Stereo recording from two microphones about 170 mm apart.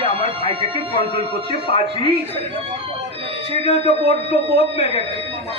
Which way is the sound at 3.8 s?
35° left (ahead or behind).